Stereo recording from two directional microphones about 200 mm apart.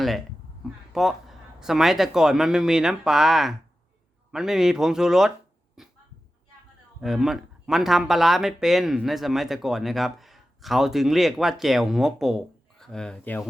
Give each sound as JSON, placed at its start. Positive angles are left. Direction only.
{"t": 0.6, "sound": "speech", "side_deg": 0}
{"t": 5.8, "sound": "a sound", "side_deg": 0}
{"t": 7.0, "sound": "speech", "side_deg": 0}